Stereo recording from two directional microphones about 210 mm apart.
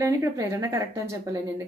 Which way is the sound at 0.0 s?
15° right (ahead or behind).